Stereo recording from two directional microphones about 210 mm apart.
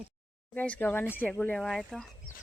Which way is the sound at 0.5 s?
5° left (ahead or behind).